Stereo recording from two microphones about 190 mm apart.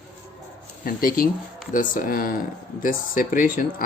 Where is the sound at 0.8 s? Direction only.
50° left (ahead or behind).